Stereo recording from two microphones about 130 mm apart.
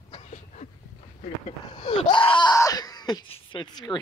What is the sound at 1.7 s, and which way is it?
Speech, 40° left (ahead or behind).